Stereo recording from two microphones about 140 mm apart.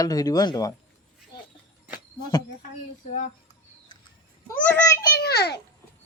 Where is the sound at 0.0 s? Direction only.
25° left (ahead or behind).